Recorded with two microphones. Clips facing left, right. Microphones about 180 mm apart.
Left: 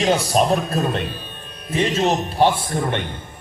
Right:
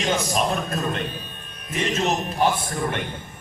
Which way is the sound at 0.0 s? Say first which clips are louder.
Left 5 dB; 35° left (ahead or behind).